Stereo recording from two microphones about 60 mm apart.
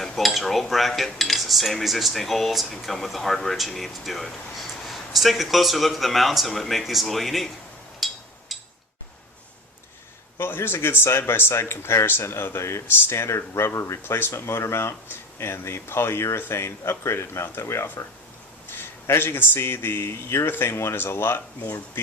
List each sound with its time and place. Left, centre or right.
0.0 s dishes: centre
0.7 s cutlery: centre
7.9 s a sound: centre
10.3 s speech: left
14.1 s speech: left